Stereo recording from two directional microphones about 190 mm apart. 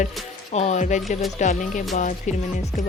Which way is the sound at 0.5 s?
35° left (ahead or behind).